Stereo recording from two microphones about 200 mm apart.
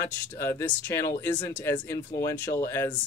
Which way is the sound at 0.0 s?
15° left (ahead or behind).